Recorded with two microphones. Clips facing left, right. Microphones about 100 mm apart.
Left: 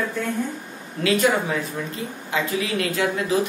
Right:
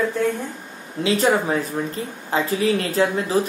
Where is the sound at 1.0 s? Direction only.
30° right (ahead or behind).